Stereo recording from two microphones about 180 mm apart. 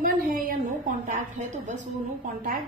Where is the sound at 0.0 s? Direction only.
50° right (ahead or behind).